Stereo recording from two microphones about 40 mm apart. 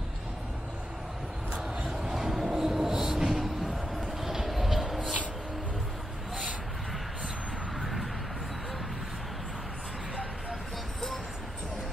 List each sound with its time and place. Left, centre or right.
2.1 s train: centre
2.4 s music: centre
7.8 s a sound: centre